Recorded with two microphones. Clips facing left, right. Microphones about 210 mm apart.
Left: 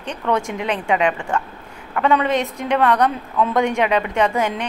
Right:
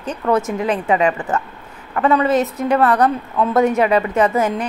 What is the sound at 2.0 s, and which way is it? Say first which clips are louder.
A woman's voice: right 3 dB; 5° right (ahead or behind).